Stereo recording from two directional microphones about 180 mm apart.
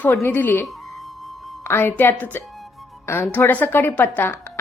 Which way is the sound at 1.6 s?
15° left (ahead or behind).